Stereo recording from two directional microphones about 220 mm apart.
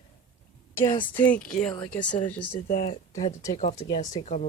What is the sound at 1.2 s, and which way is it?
Speech, 5° left (ahead or behind).